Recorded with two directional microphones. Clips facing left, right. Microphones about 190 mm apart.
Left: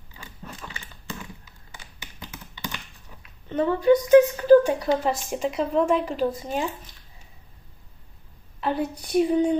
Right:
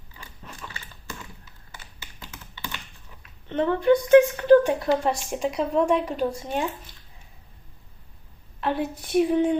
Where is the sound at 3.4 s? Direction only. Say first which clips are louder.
Even; 10° left (ahead or behind).